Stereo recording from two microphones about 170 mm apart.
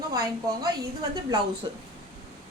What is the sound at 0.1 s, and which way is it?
A woman's voice, 20° right (ahead or behind).